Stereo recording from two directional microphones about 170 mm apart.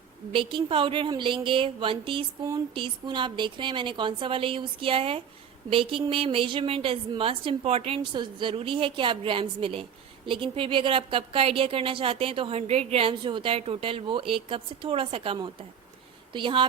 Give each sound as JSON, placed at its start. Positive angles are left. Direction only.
{"t": 0.3, "sound": "a woman's voice", "side_deg": -30}